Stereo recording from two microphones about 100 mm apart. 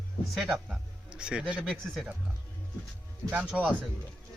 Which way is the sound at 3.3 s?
15° right (ahead or behind).